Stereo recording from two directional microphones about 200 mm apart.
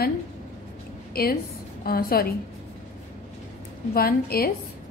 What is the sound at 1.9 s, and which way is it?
Speech, 50° left (ahead or behind).